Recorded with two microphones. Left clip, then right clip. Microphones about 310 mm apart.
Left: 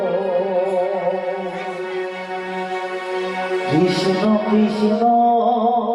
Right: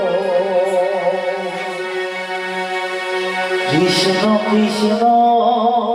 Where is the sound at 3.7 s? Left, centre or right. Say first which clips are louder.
Right 2 dB; centre.